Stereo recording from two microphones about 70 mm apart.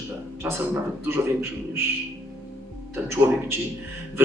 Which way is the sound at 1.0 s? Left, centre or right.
Right.